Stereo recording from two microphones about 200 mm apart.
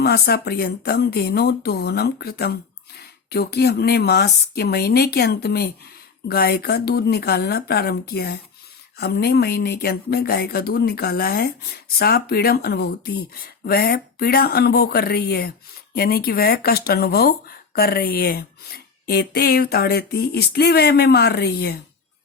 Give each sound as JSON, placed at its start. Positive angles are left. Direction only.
{"t": 0.0, "sound": "speech", "side_deg": 55}